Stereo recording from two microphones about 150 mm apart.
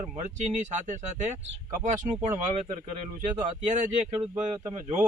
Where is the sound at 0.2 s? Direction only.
50° right (ahead or behind).